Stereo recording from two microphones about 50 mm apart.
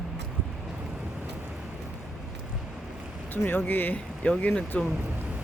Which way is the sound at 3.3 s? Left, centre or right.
Left.